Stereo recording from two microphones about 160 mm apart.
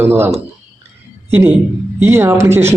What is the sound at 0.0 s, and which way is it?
Speech, 15° right (ahead or behind).